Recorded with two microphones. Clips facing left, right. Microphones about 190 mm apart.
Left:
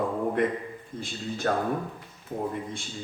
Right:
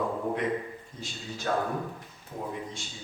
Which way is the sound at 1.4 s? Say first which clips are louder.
Left 2 dB; 55° left (ahead or behind).